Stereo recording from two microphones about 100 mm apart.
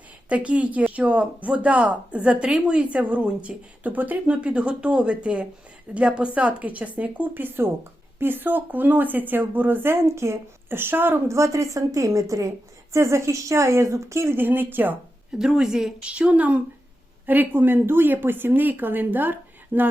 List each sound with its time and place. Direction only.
0.3 s speech: 15° right (ahead or behind)
15.3 s speech: 5° right (ahead or behind)